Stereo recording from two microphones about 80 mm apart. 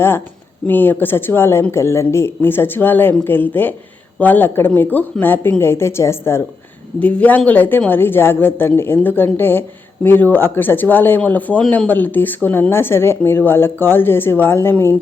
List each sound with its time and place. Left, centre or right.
0.7 s a woman's voice: left
7.0 s a woman's voice: centre